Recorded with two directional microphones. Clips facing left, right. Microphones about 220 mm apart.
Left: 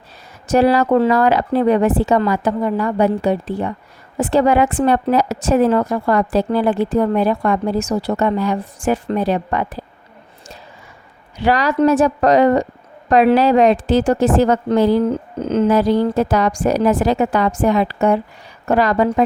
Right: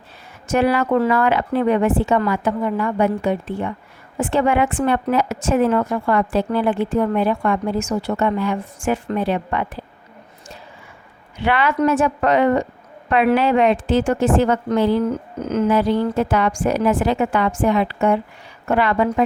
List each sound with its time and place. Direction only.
0.4 s a woman's voice: 35° left (ahead or behind)
11.3 s a woman's voice: 40° left (ahead or behind)